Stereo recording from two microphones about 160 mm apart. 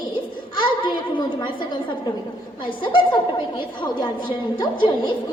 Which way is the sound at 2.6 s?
30° left (ahead or behind).